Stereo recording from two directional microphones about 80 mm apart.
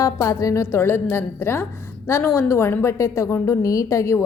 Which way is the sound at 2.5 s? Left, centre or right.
Left.